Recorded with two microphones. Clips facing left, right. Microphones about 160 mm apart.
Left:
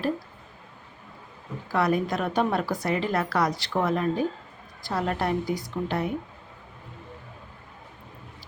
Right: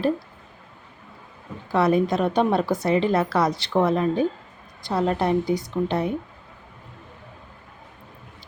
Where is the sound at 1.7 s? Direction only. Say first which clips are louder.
Right 5 dB; 25° right (ahead or behind).